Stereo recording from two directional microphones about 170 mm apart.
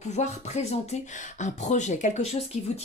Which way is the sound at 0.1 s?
40° left (ahead or behind).